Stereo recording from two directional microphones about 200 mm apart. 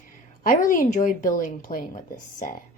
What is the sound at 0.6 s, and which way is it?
A woman's voice, 40° left (ahead or behind).